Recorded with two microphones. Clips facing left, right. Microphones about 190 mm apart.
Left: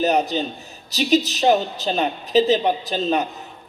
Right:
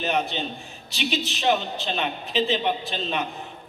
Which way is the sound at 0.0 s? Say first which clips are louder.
Left 6 dB; 40° left (ahead or behind).